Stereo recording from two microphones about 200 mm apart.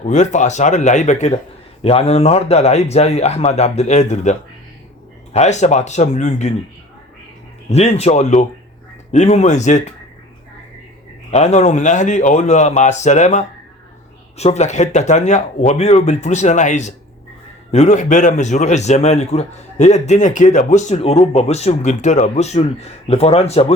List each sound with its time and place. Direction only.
0.0 s a man's voice: 35° left (ahead or behind)
7.7 s a man's voice: 35° left (ahead or behind)
11.3 s a man's voice: 35° left (ahead or behind)